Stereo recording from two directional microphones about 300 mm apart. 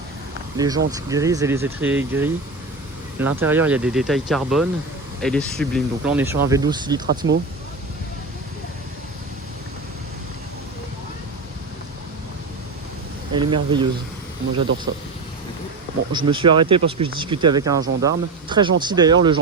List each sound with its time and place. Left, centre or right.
0.5 s speech: centre
7.2 s speech: right
13.3 s speech: centre
16.1 s speech: centre